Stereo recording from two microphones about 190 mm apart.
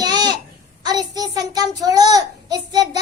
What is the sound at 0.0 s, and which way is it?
Babbling, 20° right (ahead or behind).